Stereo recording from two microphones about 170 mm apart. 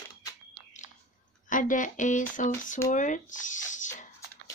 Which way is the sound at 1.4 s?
50° left (ahead or behind).